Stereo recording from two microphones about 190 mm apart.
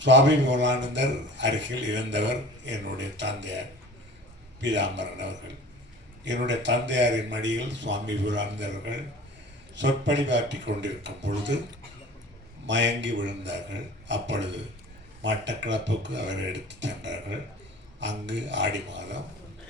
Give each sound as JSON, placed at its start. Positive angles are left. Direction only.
{"t": 0.0, "sound": "a man's voice", "side_deg": -70}
{"t": 4.6, "sound": "a man's voice", "side_deg": -70}
{"t": 12.6, "sound": "a man's voice", "side_deg": -70}